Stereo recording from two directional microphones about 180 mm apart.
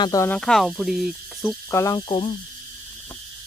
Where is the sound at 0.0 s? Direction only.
20° left (ahead or behind).